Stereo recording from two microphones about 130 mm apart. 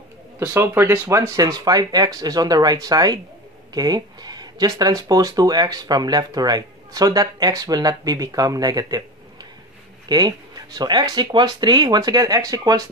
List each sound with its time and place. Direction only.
0.4 s speech: 15° right (ahead or behind)